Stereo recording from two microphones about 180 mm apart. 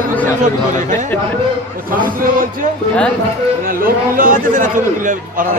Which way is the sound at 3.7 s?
50° right (ahead or behind).